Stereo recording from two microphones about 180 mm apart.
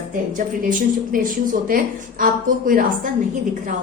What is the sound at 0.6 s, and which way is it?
Speech, 50° right (ahead or behind).